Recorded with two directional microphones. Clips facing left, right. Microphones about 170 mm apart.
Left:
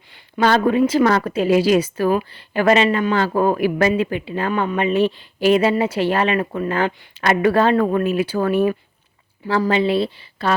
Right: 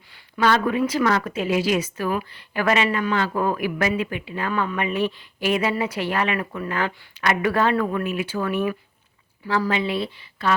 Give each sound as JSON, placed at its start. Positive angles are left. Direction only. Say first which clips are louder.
{"t": 0.3, "sound": "a woman's voice", "louder": "left 4 dB", "side_deg": 30}